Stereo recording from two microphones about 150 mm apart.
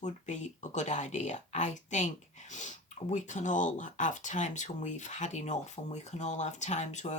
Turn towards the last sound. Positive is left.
turn(degrees=50)  # may be behind; listen again after turning